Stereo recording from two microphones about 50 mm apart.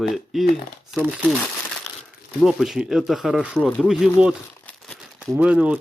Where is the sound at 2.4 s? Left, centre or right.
Centre.